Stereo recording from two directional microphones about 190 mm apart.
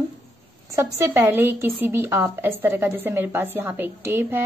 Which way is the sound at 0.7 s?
15° right (ahead or behind).